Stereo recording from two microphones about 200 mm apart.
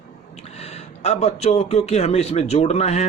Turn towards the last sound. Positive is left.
turn(degrees=30)  # may be behind; listen again after turning